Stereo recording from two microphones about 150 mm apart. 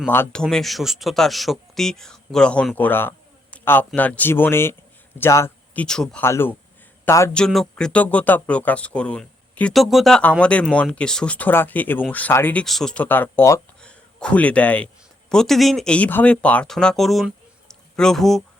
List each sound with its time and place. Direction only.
0.1 s speech: 15° left (ahead or behind)
0.4 s a man's voice: centre (ahead or behind); by 5.8 s 15° left (ahead or behind)
5.8 s speech: 5° left (ahead or behind)
6.2 s a man's voice: 15° left (ahead or behind)
7.3 s speech: 5° left (ahead or behind)
12.6 s speech: centre (ahead or behind)